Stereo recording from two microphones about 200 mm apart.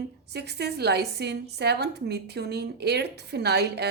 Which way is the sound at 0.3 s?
55° right (ahead or behind).